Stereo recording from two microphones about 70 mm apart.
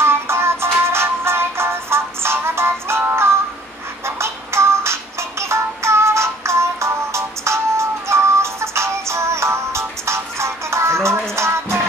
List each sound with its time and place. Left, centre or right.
0.0 s music: right